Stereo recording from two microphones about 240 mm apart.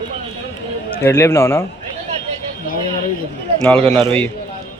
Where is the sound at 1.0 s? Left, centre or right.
Centre.